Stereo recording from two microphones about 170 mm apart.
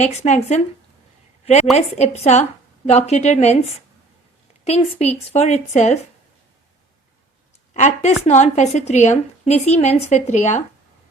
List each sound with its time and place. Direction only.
0.0 s a woman's voice: 40° left (ahead or behind)
1.7 s a woman's voice: 40° left (ahead or behind)
4.6 s a woman's voice: 40° left (ahead or behind)
7.7 s a woman's voice: 45° left (ahead or behind)